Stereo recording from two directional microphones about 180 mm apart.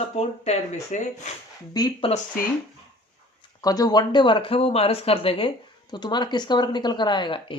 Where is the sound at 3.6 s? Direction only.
20° left (ahead or behind).